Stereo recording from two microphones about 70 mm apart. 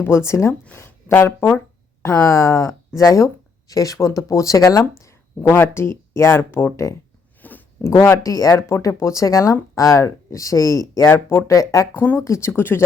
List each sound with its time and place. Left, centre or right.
0.0 s speech: left
5.4 s speech: left
7.4 s a sound: left
7.9 s speech: left
8.2 s speech: left
11.1 s speech: left
11.4 s speech: left
11.9 s speech: left
12.2 s speech: left